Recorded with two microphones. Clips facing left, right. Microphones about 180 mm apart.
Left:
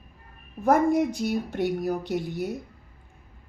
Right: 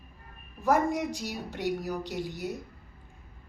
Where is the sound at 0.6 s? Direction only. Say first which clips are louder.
Left 5 dB; 55° left (ahead or behind).